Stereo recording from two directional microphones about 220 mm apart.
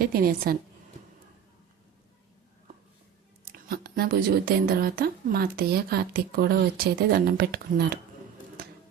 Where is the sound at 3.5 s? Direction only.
45° right (ahead or behind).